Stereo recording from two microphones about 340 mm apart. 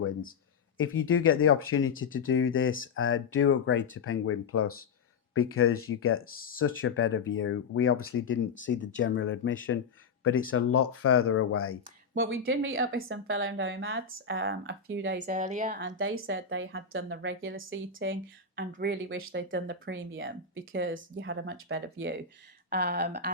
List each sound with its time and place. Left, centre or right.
0.8 s speech: left
12.1 s speech: right